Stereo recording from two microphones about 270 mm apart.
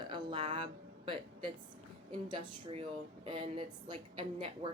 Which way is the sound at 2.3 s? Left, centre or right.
Centre.